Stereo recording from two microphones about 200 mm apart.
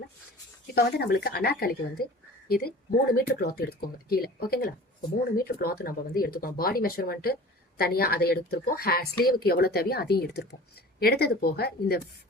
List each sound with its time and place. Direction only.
0.7 s a woman's voice: 50° left (ahead or behind)